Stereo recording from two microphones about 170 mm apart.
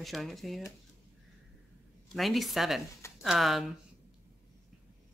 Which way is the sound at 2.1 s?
Centre (ahead or behind).